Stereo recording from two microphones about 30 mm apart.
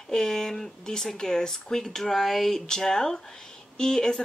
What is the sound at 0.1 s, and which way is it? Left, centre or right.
Speech, centre.